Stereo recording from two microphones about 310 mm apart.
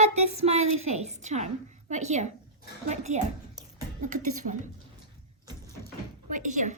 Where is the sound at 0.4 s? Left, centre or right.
Right.